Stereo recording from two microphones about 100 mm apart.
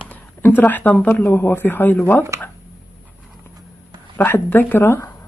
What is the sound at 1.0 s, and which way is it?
Speech, 20° left (ahead or behind).